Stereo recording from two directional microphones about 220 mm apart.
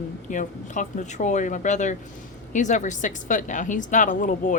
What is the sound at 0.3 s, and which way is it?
A woman's voice, 35° left (ahead or behind).